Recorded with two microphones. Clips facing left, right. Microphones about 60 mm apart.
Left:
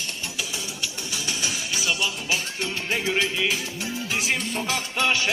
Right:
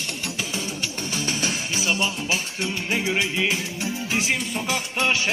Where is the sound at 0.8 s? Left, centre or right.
Right.